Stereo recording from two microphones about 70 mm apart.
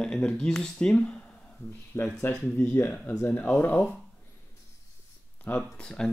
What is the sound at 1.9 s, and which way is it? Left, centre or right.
Speech, left.